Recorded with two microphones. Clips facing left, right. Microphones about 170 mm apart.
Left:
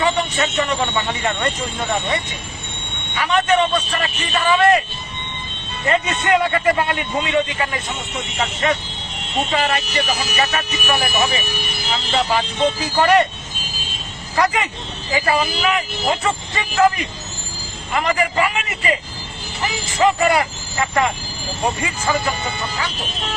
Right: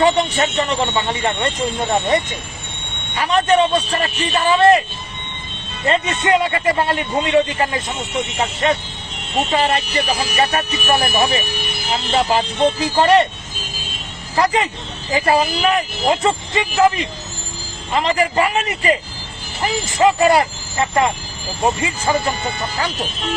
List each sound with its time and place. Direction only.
0.0 s speech: 40° right (ahead or behind)
3.2 s speech: 35° right (ahead or behind)
5.9 s speech: 25° right (ahead or behind)
12.3 s speech: 30° right (ahead or behind)
14.3 s speech: 30° right (ahead or behind)
16.6 s speech: 20° right (ahead or behind)
17.9 s speech: 30° right (ahead or behind)